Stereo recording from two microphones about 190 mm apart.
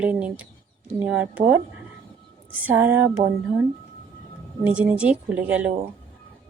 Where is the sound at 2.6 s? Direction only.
10° right (ahead or behind).